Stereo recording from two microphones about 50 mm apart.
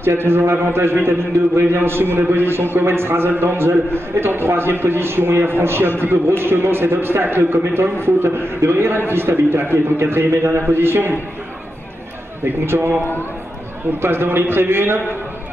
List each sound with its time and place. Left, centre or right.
0.0 s a man's voice: right
12.6 s a man's voice: right
14.0 s a man's voice: right